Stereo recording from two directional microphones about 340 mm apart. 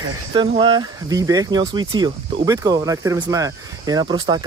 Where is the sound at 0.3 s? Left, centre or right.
Centre.